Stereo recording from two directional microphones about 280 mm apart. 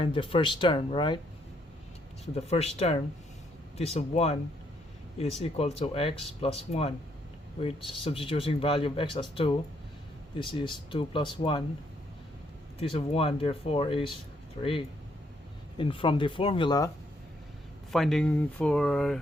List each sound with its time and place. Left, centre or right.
0.0 s speech: centre
2.3 s speech: left
5.4 s speech: left
12.8 s speech: centre
17.9 s speech: centre